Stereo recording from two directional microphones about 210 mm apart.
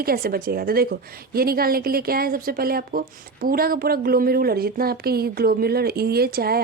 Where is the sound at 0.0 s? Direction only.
45° right (ahead or behind).